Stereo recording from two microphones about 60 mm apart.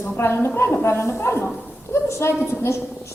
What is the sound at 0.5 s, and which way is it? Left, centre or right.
A woman's voice, left.